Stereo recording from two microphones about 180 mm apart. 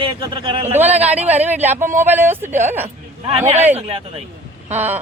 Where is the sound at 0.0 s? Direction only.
30° right (ahead or behind).